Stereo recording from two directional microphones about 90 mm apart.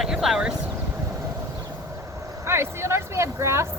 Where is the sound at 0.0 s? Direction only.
5° right (ahead or behind).